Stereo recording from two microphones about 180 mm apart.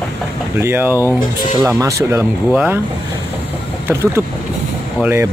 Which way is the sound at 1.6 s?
20° right (ahead or behind).